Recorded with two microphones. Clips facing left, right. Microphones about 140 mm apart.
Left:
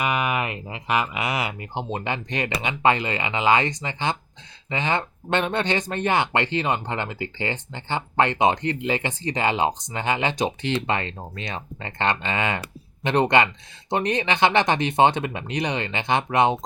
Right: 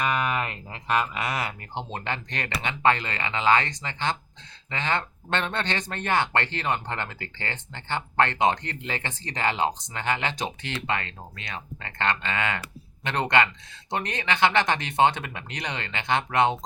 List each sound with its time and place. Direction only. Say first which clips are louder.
0.0 s speech: left 2 dB; 10° left (ahead or behind)